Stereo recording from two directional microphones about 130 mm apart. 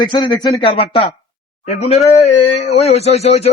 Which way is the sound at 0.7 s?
45° left (ahead or behind).